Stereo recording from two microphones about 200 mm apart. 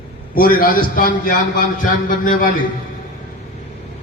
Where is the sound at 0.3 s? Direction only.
45° left (ahead or behind).